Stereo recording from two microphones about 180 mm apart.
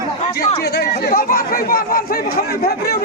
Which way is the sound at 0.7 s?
65° left (ahead or behind).